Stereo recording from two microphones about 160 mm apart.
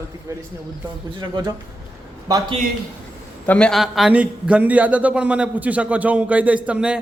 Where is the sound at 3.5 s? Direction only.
5° left (ahead or behind).